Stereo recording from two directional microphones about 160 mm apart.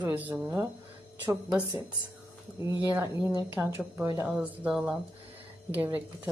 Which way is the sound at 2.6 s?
15° right (ahead or behind).